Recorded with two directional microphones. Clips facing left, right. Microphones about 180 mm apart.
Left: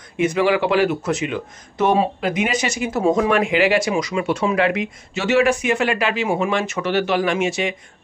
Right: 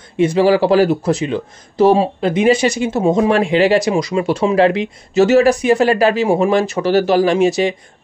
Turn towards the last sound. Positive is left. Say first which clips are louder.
# right 7 dB
turn(degrees=-35)  # may be behind; listen again after turning